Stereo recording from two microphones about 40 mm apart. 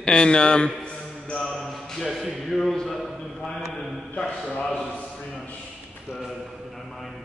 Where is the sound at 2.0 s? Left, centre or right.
Centre.